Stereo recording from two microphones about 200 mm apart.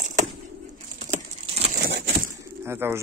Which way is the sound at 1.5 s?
35° right (ahead or behind).